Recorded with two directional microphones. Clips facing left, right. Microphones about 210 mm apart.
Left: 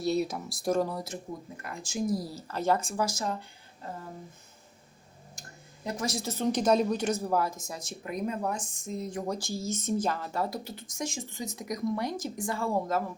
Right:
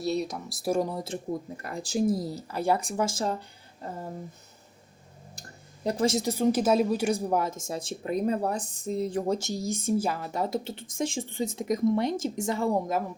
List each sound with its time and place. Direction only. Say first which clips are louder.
0.0 s speech: left 1 dB; centre (ahead or behind); by 3.3 s 30° right (ahead or behind)
5.4 s a sound: right 7 dB; 35° right (ahead or behind)
6.1 s speech: right 5 dB; 15° right (ahead or behind)
7.7 s speech: right 7 dB; 30° right (ahead or behind)